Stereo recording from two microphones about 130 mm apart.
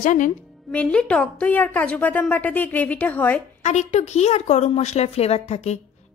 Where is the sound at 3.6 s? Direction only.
60° left (ahead or behind).